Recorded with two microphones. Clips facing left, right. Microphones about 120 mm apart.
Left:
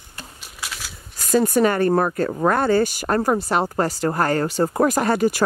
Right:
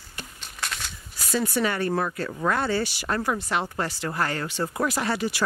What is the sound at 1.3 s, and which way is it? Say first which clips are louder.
Speech: left 8 dB; 45° left (ahead or behind).